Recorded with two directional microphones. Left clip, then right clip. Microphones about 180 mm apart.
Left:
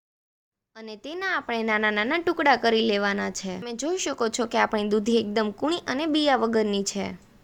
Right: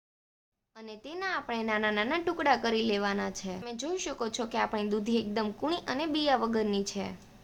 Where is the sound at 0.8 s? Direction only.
30° left (ahead or behind).